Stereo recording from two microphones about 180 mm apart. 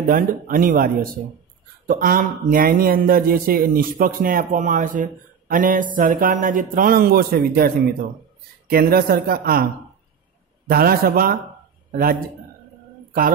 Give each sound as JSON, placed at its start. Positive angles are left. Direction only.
{"t": 0.0, "sound": "speech", "side_deg": -50}
{"t": 10.7, "sound": "speech", "side_deg": -55}